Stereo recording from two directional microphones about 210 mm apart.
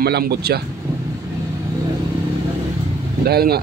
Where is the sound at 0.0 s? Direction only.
50° right (ahead or behind).